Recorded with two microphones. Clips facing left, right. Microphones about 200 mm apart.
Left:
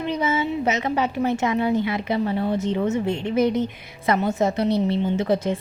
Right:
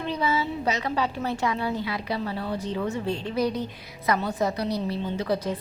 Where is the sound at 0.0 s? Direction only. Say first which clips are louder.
Left 3 dB; 20° left (ahead or behind).